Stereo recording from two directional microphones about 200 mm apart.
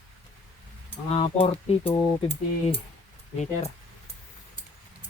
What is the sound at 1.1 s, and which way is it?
Speech, 30° left (ahead or behind).